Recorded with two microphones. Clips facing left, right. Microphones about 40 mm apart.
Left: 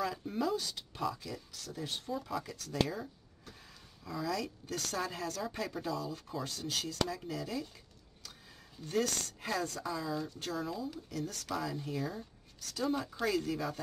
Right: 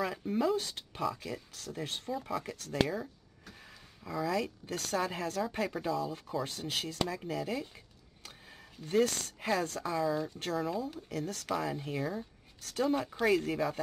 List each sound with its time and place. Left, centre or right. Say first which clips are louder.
0.0 s a sound: right 1 dB; right
0.6 s speech: right 3 dB; right
4.0 s a woman's voice: right 4 dB; right
8.8 s speech: right 4 dB; right
10.0 s a woman's voice: right 5 dB; right
10.7 s speech: right 4 dB; right
12.0 s a woman's voice: right 3 dB; right
12.5 s speech: right 4 dB; right
12.9 s speech: right 5 dB; right